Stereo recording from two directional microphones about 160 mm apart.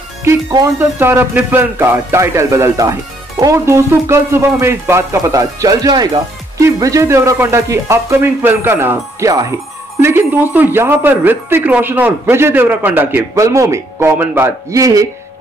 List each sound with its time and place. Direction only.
0.2 s speech: 20° right (ahead or behind)